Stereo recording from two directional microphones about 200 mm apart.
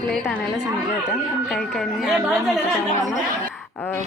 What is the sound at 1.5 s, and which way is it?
A woman's voice, centre (ahead or behind).